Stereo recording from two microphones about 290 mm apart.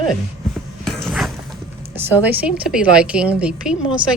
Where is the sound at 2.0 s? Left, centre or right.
Centre.